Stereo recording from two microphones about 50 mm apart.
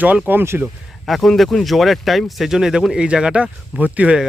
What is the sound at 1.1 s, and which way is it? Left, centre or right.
Speech, centre.